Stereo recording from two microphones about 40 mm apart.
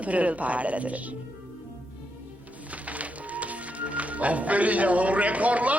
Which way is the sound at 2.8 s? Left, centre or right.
Right.